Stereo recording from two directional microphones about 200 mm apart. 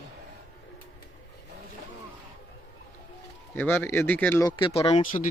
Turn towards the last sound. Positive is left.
turn(degrees=35)  # may be behind; listen again after turning